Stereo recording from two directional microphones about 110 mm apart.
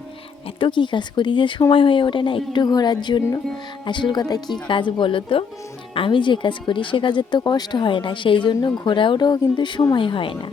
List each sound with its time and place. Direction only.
0.4 s speech: 50° left (ahead or behind)
4.7 s speech: 50° left (ahead or behind)